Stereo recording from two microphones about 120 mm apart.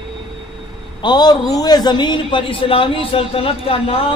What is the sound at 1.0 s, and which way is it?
A man's voice, 35° left (ahead or behind).